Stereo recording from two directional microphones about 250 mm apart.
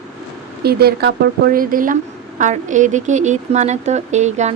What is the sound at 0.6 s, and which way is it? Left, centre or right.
Speech, right.